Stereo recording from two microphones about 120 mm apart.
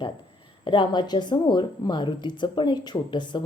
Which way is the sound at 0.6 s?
40° left (ahead or behind).